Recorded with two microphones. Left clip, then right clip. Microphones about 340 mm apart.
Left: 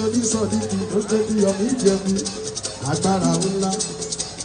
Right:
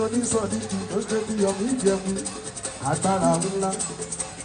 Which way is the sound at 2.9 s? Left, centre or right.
Right.